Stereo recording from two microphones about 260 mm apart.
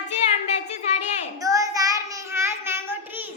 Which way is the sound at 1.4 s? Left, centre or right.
Centre.